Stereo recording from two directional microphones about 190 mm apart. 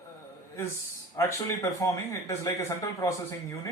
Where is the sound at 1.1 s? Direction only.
15° left (ahead or behind).